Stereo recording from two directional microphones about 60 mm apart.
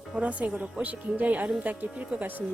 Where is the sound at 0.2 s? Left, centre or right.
Right.